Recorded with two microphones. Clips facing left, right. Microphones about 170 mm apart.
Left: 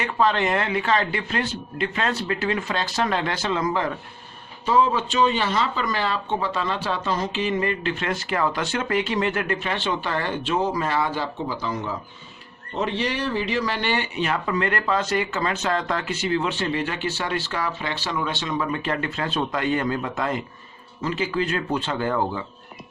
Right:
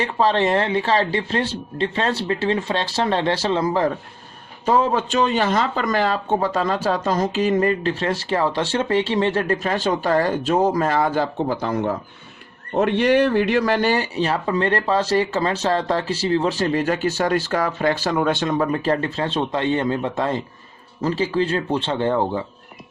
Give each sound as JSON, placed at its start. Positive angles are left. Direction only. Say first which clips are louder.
{"t": 0.0, "sound": "speech", "louder": "right 3 dB", "side_deg": -30}
{"t": 4.6, "sound": "speech", "louder": "right 2 dB", "side_deg": -45}